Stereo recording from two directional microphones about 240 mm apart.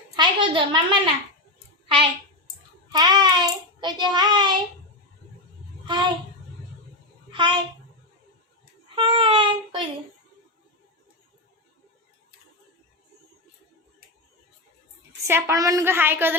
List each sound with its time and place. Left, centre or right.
0.2 s a woman's voice: centre
2.9 s a child's voice: centre
5.8 s a child's voice: centre
7.3 s a child's voice: centre
9.0 s a child's voice: right
15.2 s a child's voice: centre